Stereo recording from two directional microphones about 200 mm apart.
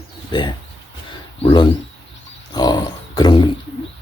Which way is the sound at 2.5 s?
20° left (ahead or behind).